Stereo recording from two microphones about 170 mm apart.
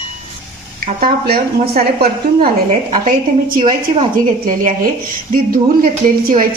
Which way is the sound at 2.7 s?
40° right (ahead or behind).